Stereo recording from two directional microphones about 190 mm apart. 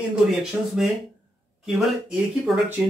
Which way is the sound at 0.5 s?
5° right (ahead or behind).